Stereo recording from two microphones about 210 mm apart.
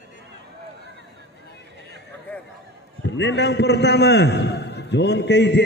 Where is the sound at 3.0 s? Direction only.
55° left (ahead or behind).